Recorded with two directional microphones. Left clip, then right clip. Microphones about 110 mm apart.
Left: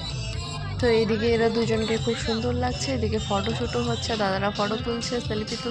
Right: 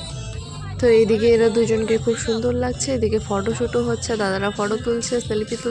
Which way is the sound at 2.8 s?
35° right (ahead or behind).